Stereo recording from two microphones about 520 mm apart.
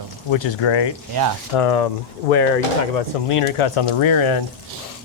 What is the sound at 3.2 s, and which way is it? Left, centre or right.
Speech, left.